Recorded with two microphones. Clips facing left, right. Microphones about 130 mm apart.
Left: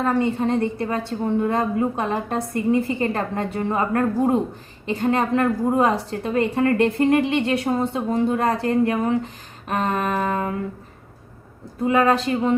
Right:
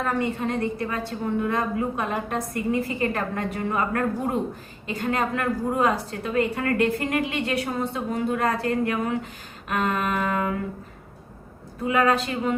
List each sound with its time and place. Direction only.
0.0 s a woman's voice: 25° left (ahead or behind)
11.9 s a man's voice: 30° left (ahead or behind)